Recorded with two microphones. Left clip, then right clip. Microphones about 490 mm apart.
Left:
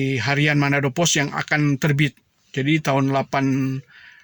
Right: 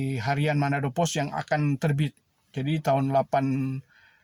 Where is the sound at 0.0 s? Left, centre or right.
Right.